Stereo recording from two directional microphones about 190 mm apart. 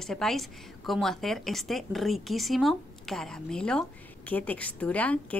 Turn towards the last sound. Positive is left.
turn(degrees=5)  # may be behind; listen again after turning